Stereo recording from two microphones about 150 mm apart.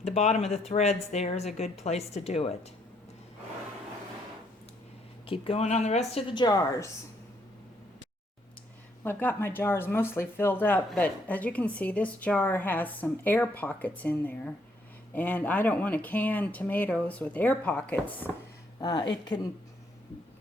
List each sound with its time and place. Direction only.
0.0 s speech: 45° left (ahead or behind)
5.2 s speech: 35° left (ahead or behind)
6.3 s a woman's voice: 30° left (ahead or behind)
9.0 s speech: 15° left (ahead or behind)
18.8 s a woman's voice: 30° left (ahead or behind)